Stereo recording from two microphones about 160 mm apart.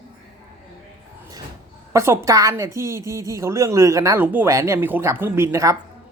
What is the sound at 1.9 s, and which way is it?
A woman's voice, 15° right (ahead or behind).